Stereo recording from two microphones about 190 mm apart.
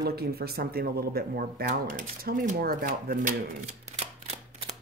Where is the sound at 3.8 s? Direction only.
35° right (ahead or behind).